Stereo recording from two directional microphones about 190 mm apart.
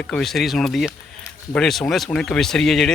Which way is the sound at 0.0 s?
5° left (ahead or behind).